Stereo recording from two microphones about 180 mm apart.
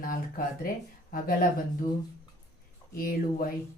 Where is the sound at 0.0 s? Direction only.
50° left (ahead or behind).